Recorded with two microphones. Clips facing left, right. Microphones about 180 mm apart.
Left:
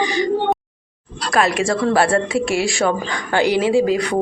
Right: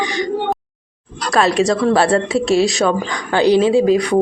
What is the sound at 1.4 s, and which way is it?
A woman's voice, 25° right (ahead or behind).